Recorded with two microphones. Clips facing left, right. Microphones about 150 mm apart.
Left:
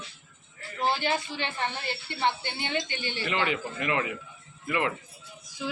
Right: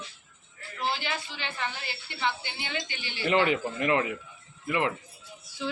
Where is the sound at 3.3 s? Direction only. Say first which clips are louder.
Right 6 dB; 35° right (ahead or behind).